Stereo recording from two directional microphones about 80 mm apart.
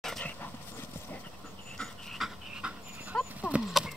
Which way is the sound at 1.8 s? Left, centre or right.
Centre.